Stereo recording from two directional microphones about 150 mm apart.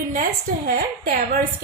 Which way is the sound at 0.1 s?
85° right.